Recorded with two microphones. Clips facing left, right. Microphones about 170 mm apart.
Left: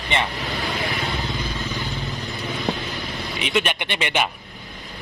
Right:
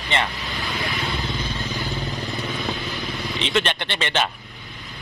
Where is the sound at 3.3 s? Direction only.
10° left (ahead or behind).